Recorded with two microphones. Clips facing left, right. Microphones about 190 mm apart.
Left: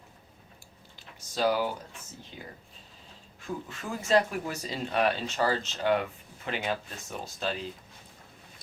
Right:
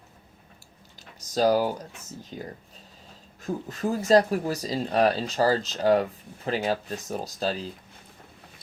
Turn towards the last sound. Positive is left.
turn(degrees=-35)  # may be behind; listen again after turning